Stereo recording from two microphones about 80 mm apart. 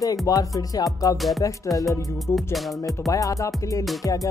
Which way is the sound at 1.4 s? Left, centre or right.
Left.